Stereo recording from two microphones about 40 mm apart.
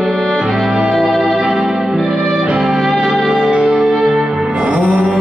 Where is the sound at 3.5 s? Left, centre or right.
Right.